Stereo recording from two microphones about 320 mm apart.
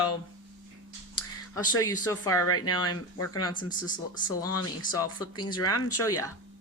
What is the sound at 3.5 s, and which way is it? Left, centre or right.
Speech, centre.